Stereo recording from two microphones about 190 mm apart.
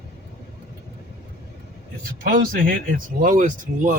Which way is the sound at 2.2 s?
50° right (ahead or behind).